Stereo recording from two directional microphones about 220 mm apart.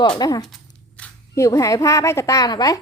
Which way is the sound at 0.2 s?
15° left (ahead or behind).